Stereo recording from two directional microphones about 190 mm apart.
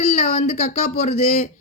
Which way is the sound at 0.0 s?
35° left (ahead or behind).